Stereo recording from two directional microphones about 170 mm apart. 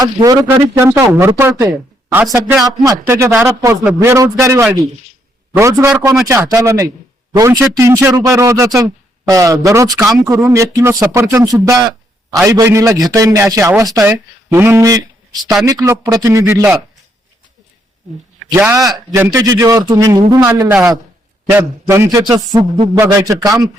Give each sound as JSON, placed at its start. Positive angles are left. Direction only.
{"t": 0.0, "sound": "speech", "side_deg": -20}
{"t": 2.8, "sound": "speech", "side_deg": -20}
{"t": 18.5, "sound": "speech", "side_deg": -10}